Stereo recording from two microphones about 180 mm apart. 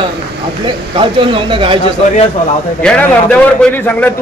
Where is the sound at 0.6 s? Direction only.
30° right (ahead or behind).